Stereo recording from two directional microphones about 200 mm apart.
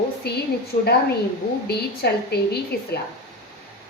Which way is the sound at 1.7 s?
55° left (ahead or behind).